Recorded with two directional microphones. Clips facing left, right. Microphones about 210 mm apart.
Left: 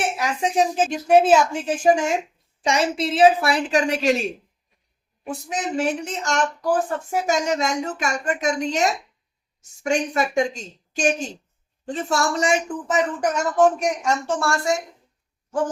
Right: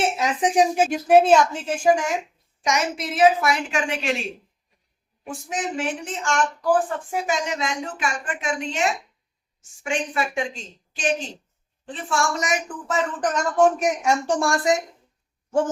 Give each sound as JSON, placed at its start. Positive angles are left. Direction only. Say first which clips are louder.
{"t": 0.0, "sound": "a woman's voice", "louder": "right 2 dB", "side_deg": -20}
{"t": 5.3, "sound": "a woman's voice", "louder": "left 2 dB", "side_deg": 40}
{"t": 12.9, "sound": "a woman's voice", "louder": "left 2 dB", "side_deg": 15}